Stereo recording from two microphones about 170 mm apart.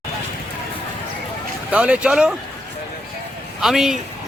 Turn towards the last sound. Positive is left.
turn(degrees=0)  # may be behind; listen again after turning